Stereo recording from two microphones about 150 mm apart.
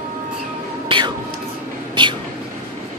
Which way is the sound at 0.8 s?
30° right (ahead or behind).